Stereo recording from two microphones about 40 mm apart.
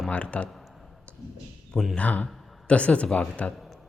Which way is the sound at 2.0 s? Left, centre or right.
Left.